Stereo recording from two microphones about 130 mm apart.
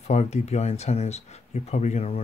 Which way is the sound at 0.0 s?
60° left (ahead or behind).